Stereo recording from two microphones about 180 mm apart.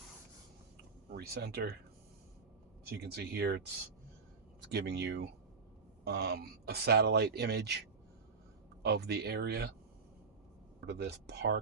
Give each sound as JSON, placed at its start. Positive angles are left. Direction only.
{"t": 1.1, "sound": "speech", "side_deg": -60}
{"t": 2.8, "sound": "speech", "side_deg": -65}
{"t": 4.7, "sound": "speech", "side_deg": -70}
{"t": 6.1, "sound": "speech", "side_deg": -60}
{"t": 8.8, "sound": "speech", "side_deg": -65}
{"t": 10.8, "sound": "speech", "side_deg": -70}